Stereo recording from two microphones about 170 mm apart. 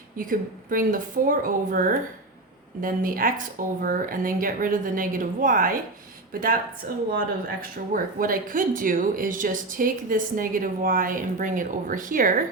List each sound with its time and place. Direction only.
0.2 s a woman's voice: 55° right (ahead or behind)
7.1 s speech: 55° right (ahead or behind)